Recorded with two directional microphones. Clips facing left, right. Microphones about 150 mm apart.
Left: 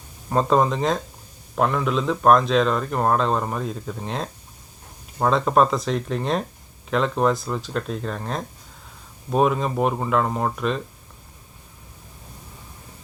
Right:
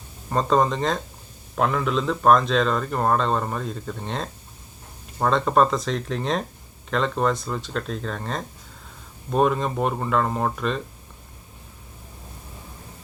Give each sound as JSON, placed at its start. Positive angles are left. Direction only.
{"t": 0.3, "sound": "a man's voice", "side_deg": 5}